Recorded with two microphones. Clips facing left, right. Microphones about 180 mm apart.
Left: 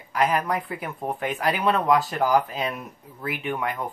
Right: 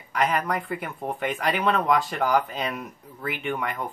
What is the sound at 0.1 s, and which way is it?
Speech, 5° left (ahead or behind).